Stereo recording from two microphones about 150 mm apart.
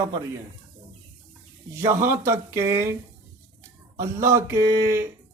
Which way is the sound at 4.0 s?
20° right (ahead or behind).